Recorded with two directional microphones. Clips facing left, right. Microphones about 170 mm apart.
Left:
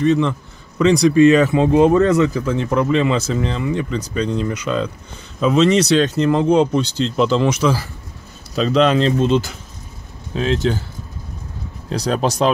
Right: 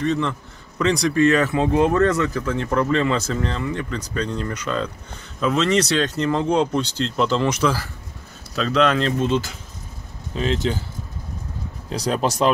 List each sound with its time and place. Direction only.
0.0 s speech: 10° left (ahead or behind)
5.9 s speech: 5° left (ahead or behind)
6.5 s speech: 20° left (ahead or behind)
10.3 s speech: centre (ahead or behind)
11.9 s speech: 5° right (ahead or behind)